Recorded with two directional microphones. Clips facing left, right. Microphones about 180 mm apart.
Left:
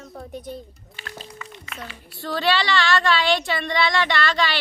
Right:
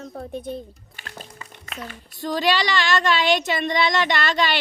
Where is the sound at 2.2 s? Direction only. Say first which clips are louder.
Right 1 dB; 15° right (ahead or behind).